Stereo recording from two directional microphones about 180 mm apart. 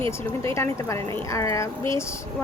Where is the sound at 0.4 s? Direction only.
15° left (ahead or behind).